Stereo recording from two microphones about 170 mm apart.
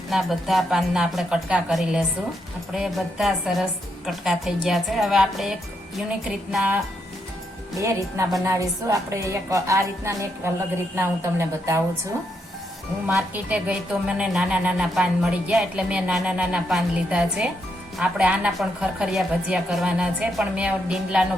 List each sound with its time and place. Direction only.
0.1 s a woman's voice: centre (ahead or behind)
7.8 s a woman's voice: 15° right (ahead or behind)
13.1 s a woman's voice: 10° right (ahead or behind)